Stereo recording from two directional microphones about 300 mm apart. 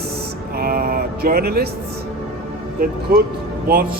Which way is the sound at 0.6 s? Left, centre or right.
Right.